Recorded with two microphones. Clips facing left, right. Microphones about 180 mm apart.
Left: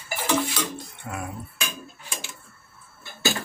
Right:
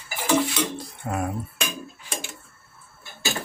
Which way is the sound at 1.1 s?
35° right (ahead or behind).